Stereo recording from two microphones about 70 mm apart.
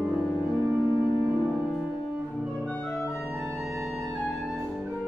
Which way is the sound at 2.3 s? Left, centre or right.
Centre.